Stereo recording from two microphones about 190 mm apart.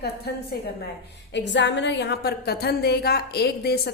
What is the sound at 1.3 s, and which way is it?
A woman's voice, 70° left (ahead or behind).